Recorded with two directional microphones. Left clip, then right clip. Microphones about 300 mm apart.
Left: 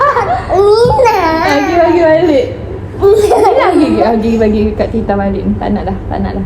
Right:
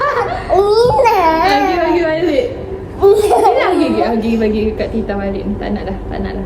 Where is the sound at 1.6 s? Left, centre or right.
Centre.